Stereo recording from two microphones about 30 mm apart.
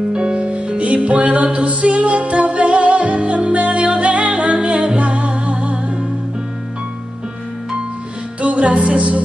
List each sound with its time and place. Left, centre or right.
0.1 s music: right
0.4 s music: right
8.4 s music: right